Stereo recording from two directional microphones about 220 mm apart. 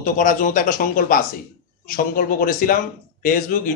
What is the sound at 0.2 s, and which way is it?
Speech, 35° left (ahead or behind).